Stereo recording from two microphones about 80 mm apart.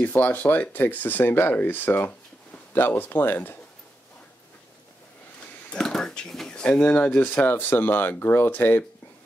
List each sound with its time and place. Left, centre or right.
0.0 s speech: left
5.7 s speech: centre; by 8.8 s left